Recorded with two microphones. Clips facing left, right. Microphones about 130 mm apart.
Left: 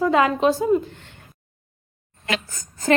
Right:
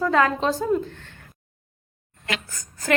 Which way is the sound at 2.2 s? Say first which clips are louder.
Left 4 dB; 25° left (ahead or behind).